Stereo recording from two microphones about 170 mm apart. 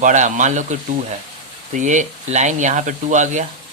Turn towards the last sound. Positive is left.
turn(degrees=-45)  # may be behind; listen again after turning